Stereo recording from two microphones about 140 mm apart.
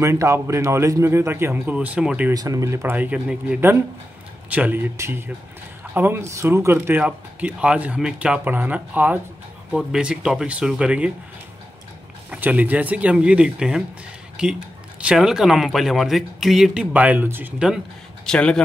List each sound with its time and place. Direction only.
0.0 s a man's voice: 20° right (ahead or behind)
2.3 s speech: 25° right (ahead or behind); by 11.1 s 5° right (ahead or behind)
12.3 s speech: 10° right (ahead or behind)
18.2 s a man's voice: 5° left (ahead or behind)